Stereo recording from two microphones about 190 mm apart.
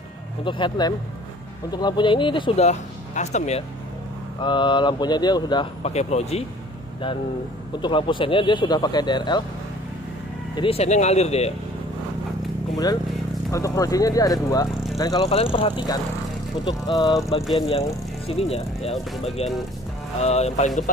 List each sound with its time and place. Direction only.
0.5 s speech: 25° left (ahead or behind)
4.4 s speech: 25° left (ahead or behind)
5.9 s speech: 35° left (ahead or behind)
7.8 s speech: 25° left (ahead or behind)
10.5 s speech: 30° left (ahead or behind)
13.5 s speech: 15° left (ahead or behind)
17.6 s speech: 30° left (ahead or behind)